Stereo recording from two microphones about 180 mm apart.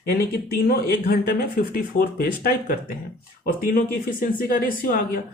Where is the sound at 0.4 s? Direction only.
60° left (ahead or behind).